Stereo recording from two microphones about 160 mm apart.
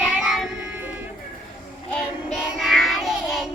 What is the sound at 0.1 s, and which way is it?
Child singing, centre (ahead or behind).